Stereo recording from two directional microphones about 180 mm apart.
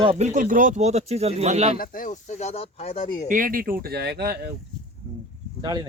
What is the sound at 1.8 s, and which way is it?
Speech, 50° left (ahead or behind).